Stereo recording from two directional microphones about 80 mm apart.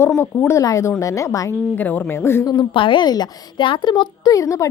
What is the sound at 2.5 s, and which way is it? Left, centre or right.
A child's voice, left.